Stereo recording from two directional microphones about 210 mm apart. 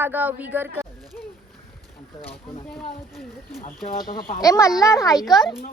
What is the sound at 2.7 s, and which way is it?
Speech, centre (ahead or behind).